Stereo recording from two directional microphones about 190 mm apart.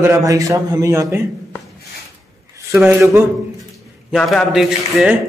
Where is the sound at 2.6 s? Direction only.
10° right (ahead or behind).